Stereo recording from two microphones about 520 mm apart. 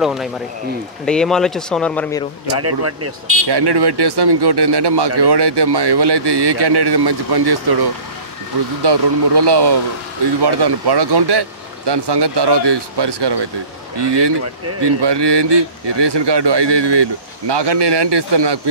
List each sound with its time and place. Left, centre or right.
0.0 s speech: centre
2.6 s speech: right
3.4 s speech: right